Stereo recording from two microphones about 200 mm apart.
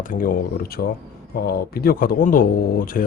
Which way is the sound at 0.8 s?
55° left (ahead or behind).